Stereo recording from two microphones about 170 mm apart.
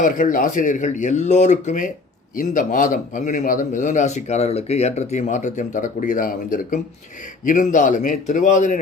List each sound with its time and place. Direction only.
0.0 s a man's voice: 50° left (ahead or behind)